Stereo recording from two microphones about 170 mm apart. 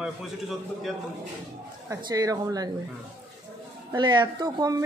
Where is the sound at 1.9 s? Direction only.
20° right (ahead or behind).